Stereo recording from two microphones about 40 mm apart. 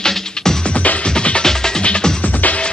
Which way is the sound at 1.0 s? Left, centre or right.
Left.